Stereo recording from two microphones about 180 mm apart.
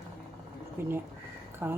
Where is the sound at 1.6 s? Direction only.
15° right (ahead or behind).